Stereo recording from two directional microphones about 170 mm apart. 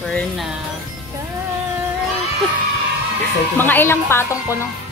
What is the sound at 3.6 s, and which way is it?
Speech, 10° left (ahead or behind).